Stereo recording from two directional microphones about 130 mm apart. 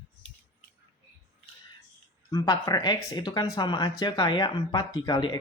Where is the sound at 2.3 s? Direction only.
35° left (ahead or behind).